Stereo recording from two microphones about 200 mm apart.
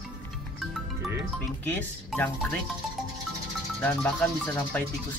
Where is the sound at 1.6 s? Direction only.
10° left (ahead or behind).